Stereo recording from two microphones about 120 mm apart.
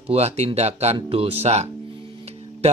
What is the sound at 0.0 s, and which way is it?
Speech, 60° right (ahead or behind).